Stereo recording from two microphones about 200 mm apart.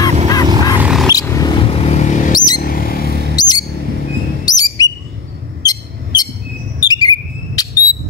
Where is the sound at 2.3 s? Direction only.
20° left (ahead or behind).